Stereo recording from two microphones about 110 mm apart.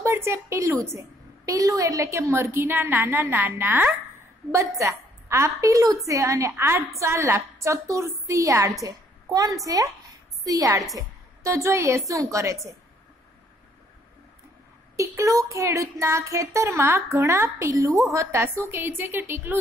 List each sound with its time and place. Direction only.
0.0 s a woman's voice: 25° right (ahead or behind)
15.0 s a woman's voice: 30° right (ahead or behind)